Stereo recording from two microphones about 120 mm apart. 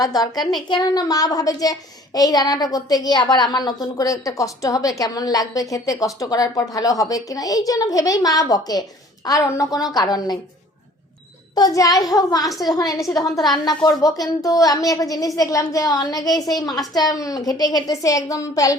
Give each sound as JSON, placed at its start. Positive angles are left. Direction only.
{"t": 0.0, "sound": "a woman's voice", "side_deg": 35}
{"t": 11.5, "sound": "a woman's voice", "side_deg": 30}